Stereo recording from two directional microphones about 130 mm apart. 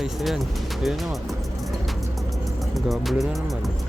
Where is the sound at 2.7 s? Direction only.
Centre (ahead or behind).